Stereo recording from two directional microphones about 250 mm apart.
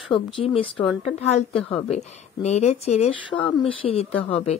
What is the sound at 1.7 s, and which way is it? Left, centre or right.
Speech, left.